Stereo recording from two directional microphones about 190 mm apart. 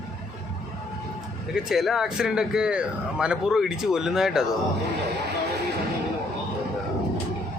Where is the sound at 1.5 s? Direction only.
5° right (ahead or behind).